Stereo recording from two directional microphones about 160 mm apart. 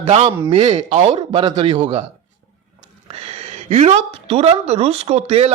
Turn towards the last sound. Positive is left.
turn(degrees=-35)  # may be behind; listen again after turning